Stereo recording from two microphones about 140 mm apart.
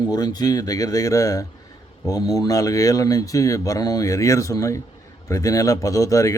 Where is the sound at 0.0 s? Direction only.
30° left (ahead or behind).